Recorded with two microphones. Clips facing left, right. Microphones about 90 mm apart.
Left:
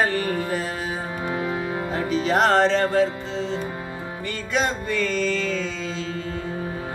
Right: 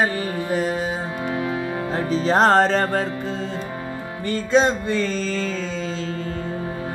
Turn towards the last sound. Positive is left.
turn(degrees=-35)  # may be behind; listen again after turning